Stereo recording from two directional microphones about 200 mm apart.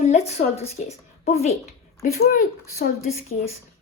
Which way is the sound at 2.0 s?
45° left (ahead or behind).